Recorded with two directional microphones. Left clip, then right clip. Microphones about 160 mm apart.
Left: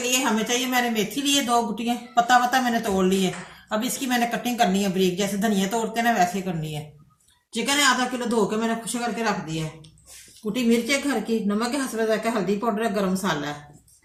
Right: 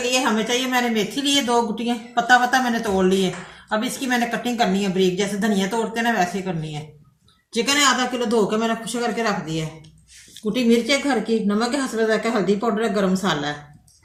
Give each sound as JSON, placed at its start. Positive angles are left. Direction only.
{"t": 0.0, "sound": "speech", "side_deg": 20}
{"t": 7.5, "sound": "speech", "side_deg": 10}